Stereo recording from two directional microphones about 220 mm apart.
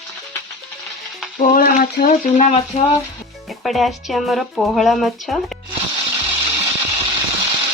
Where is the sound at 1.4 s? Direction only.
40° left (ahead or behind).